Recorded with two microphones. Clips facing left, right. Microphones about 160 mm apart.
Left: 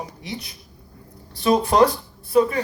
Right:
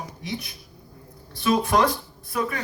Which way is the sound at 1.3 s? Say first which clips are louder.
Left 4 dB; 35° left (ahead or behind).